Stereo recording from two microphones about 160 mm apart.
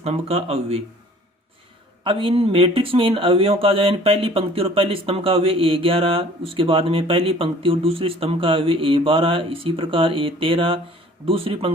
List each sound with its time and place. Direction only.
0.0 s speech: 40° right (ahead or behind)
2.0 s speech: 30° right (ahead or behind)